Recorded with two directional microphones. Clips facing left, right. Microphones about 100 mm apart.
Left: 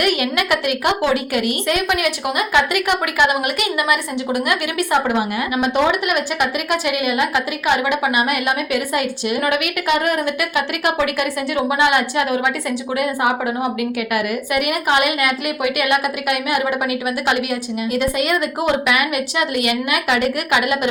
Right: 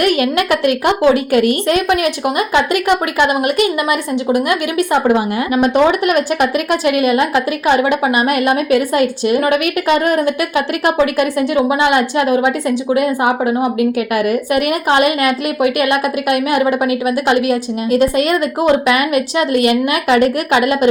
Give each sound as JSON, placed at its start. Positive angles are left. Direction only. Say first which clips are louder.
{"t": 0.0, "sound": "a woman's voice", "louder": "right 5 dB", "side_deg": -35}